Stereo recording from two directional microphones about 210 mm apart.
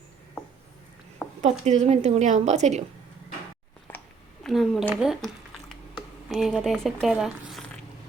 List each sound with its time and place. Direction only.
1.4 s a woman's voice: 35° right (ahead or behind)
4.4 s speech: centre (ahead or behind)